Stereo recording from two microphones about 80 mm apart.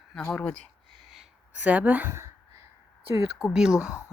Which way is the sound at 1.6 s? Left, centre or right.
Centre.